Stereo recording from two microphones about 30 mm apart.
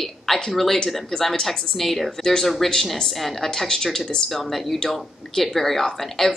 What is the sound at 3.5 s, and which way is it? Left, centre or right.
Speech, centre.